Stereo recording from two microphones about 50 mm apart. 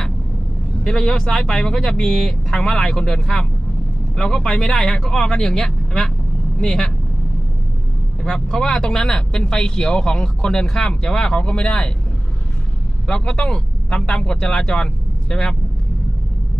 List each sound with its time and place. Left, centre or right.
0.8 s speech: centre
8.2 s speech: centre
13.0 s speech: centre